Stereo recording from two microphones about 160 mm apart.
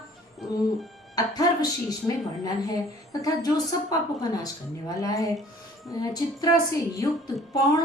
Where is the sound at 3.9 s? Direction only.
25° left (ahead or behind).